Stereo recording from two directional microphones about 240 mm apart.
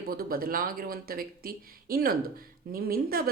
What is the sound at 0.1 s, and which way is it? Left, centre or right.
Speech, right.